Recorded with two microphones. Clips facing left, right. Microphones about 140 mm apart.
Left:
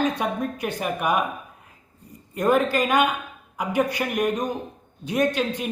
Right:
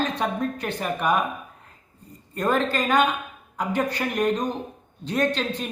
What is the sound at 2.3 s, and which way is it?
A man's voice, 10° left (ahead or behind).